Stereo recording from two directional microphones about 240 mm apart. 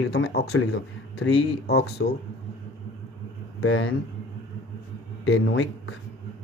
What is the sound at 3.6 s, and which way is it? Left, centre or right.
Speech, left.